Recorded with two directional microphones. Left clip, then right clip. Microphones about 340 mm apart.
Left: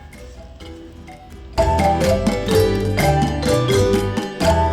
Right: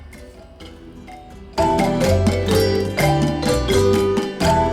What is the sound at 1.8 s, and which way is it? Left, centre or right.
Music, centre.